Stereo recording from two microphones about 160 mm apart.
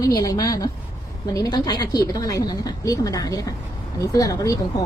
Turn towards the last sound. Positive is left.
turn(degrees=20)  # may be behind; listen again after turning